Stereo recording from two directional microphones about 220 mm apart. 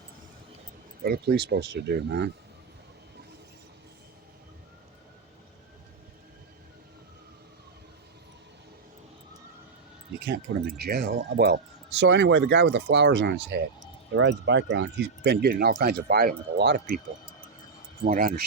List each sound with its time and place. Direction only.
1.0 s speech: 45° right (ahead or behind)
10.2 s speech: 50° right (ahead or behind)
18.0 s speech: 35° right (ahead or behind)